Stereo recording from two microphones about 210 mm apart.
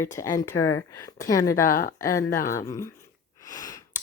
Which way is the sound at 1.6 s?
40° left (ahead or behind).